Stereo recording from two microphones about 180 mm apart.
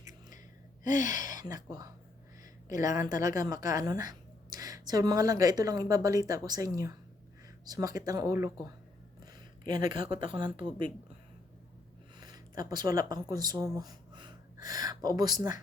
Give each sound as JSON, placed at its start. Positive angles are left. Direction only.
{"t": 0.0, "sound": "gasp", "side_deg": -20}
{"t": 0.9, "sound": "speech", "side_deg": 45}
{"t": 1.3, "sound": "speech", "side_deg": -20}
{"t": 12.2, "sound": "speech", "side_deg": -20}